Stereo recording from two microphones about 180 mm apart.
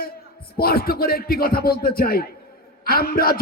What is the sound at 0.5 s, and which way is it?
A man's voice, 55° left (ahead or behind).